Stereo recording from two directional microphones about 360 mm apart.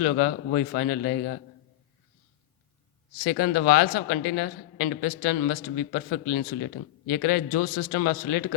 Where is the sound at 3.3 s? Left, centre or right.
Left.